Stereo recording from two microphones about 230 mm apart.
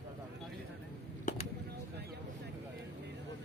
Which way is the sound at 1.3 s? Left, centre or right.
Left.